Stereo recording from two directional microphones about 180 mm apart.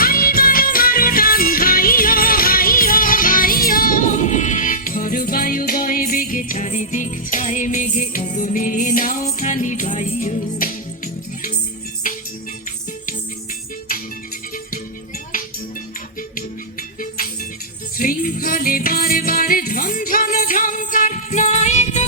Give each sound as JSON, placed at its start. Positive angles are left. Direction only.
{"t": 0.0, "sound": "music", "side_deg": 55}
{"t": 17.9, "sound": "music", "side_deg": 50}